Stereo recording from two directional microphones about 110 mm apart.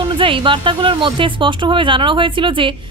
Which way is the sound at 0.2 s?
50° right (ahead or behind).